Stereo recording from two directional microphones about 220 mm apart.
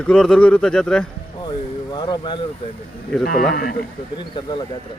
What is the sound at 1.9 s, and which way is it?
Speech, 20° left (ahead or behind).